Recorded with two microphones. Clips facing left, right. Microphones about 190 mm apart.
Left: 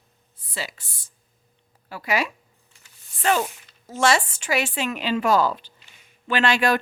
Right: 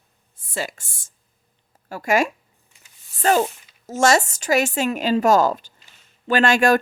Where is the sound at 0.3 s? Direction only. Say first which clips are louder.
Right 5 dB; 50° right (ahead or behind).